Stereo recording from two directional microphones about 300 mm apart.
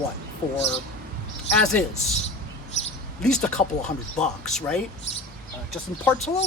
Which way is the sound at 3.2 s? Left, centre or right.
Centre.